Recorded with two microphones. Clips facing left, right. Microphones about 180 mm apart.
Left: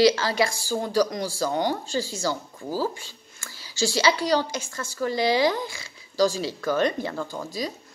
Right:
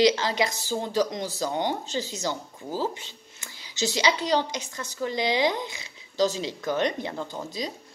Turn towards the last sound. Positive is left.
turn(degrees=-20)  # may be behind; listen again after turning